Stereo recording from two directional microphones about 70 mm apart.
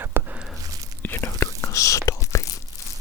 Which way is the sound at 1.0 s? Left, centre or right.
Left.